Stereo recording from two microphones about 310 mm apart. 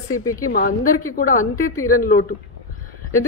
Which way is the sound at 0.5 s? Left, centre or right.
Left.